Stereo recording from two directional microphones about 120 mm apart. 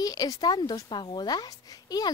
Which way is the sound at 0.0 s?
30° left (ahead or behind).